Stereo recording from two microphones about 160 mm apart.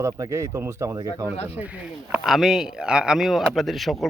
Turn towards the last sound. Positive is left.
turn(degrees=0)  # may be behind; listen again after turning